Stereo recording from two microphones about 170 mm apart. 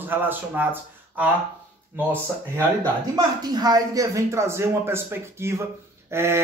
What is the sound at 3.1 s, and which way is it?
Speech, 25° right (ahead or behind).